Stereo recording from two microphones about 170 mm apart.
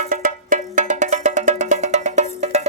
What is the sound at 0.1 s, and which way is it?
Music, 50° right (ahead or behind).